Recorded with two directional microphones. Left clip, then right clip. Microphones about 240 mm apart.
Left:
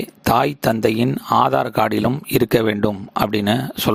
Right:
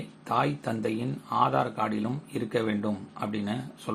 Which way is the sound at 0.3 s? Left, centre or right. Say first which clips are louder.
Left 11 dB; left.